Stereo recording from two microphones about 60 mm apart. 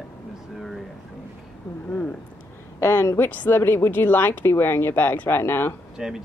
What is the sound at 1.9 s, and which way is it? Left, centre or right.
Speech, left.